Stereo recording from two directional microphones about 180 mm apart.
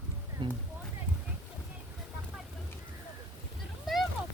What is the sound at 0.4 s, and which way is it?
Speech, 25° right (ahead or behind).